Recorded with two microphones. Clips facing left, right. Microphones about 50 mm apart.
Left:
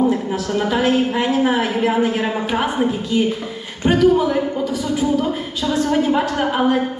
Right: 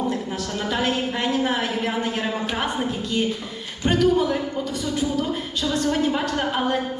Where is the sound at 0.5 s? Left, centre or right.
Centre.